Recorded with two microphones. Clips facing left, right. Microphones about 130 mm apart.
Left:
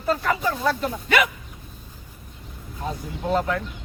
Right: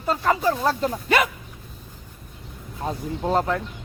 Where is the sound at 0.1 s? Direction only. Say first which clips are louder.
Right 2 dB; 30° right (ahead or behind).